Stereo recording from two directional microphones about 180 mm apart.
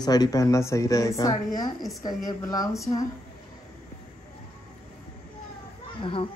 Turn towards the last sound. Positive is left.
turn(degrees=30)  # may be behind; listen again after turning